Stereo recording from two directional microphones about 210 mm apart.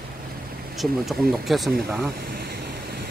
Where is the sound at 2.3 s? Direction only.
45° right (ahead or behind).